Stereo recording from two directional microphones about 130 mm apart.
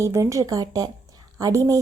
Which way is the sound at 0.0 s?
20° right (ahead or behind).